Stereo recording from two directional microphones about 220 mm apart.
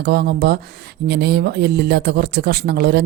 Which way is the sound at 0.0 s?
45° right (ahead or behind).